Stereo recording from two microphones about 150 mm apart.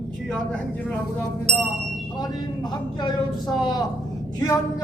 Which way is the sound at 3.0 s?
30° left (ahead or behind).